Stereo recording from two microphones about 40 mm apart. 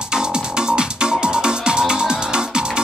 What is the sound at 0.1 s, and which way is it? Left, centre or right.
Music, right.